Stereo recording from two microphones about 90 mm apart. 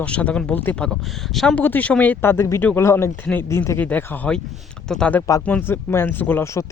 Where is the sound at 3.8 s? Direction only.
20° left (ahead or behind).